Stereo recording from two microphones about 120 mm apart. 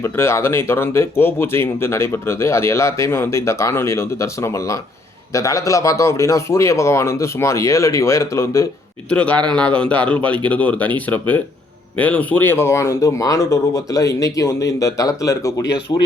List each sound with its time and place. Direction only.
0.0 s speech: 20° left (ahead or behind)
9.0 s speech: 10° left (ahead or behind); by 16.0 s 30° left (ahead or behind)